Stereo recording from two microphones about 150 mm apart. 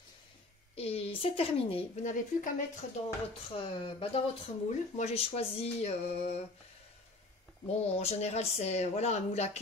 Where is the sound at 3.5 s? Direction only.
35° left (ahead or behind).